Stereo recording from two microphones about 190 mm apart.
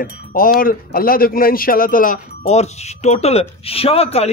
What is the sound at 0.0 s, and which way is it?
Speech, 50° left (ahead or behind).